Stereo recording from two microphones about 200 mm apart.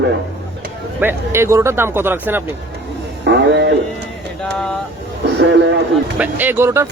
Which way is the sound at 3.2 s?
55° right (ahead or behind).